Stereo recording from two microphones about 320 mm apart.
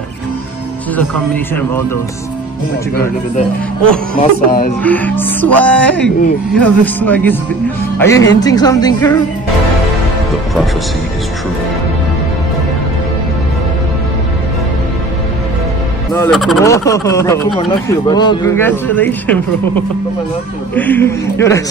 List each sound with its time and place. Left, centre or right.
0.9 s music: centre
4.2 s speech: left
4.8 s music: centre
8.0 s speech: centre
16.1 s speech: centre